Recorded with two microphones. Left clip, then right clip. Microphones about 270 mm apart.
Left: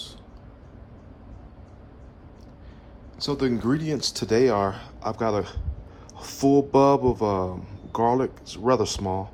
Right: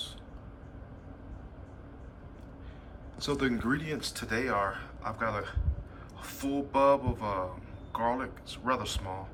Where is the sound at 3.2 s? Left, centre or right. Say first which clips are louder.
Left 5 dB; centre.